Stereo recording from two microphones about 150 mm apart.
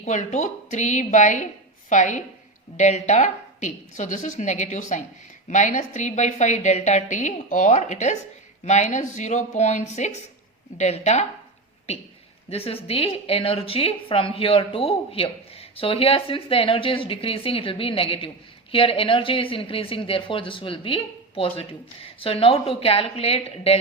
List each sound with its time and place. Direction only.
0.0 s a woman's voice: 50° left (ahead or behind)